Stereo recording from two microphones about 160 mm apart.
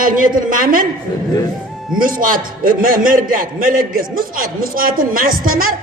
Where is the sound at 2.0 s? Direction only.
60° right (ahead or behind).